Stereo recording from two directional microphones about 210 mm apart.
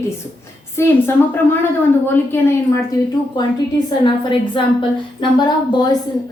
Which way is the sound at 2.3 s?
10° left (ahead or behind).